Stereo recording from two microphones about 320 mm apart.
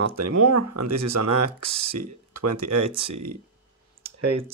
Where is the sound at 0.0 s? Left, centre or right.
Right.